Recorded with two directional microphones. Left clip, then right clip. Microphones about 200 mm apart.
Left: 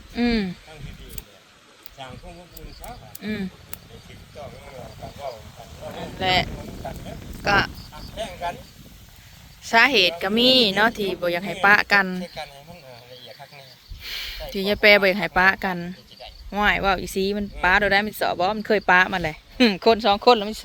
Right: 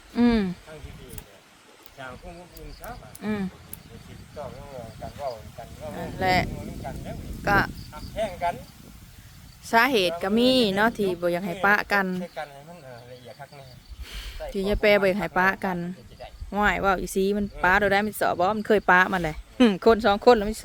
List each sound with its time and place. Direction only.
0.2 s a sound: 20° right (ahead or behind)
3.2 s speech: 20° right (ahead or behind)
6.1 s speech: 10° right (ahead or behind)
9.6 s speech: 5° right (ahead or behind)
14.0 s a sound: centre (ahead or behind)
14.5 s speech: centre (ahead or behind); by 20.6 s 15° right (ahead or behind)